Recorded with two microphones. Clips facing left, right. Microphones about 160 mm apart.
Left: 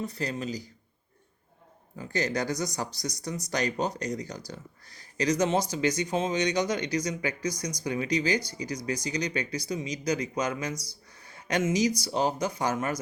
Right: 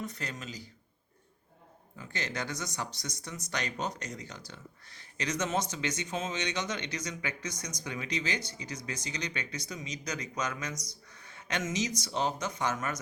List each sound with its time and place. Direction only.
0.0 s speech: 35° left (ahead or behind)
2.0 s speech: 40° left (ahead or behind)